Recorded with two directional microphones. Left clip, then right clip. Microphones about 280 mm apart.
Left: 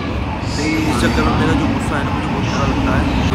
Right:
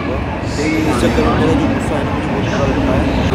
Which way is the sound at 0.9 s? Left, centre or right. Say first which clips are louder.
Right 2 dB; left.